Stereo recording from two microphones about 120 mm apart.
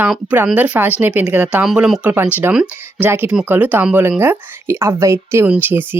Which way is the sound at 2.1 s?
15° right (ahead or behind).